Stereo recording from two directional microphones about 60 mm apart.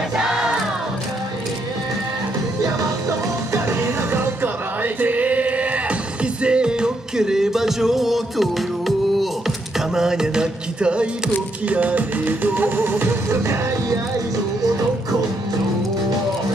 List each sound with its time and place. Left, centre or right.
0.2 s crowd: centre
2.6 s music: right
3.6 s music: right